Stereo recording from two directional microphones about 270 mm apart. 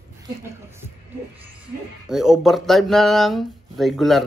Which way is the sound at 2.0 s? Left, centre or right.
Centre.